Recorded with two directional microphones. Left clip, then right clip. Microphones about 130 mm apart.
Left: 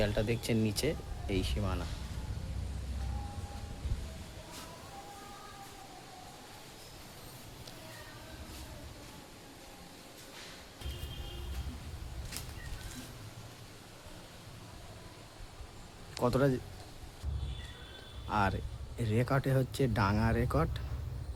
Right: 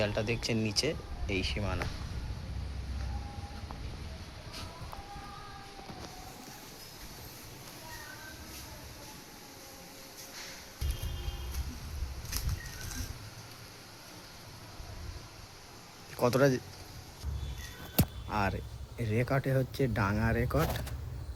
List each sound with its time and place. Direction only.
0.0 s speech: 25° left (ahead or behind)
16.2 s speech: 5° right (ahead or behind)
18.3 s speech: centre (ahead or behind)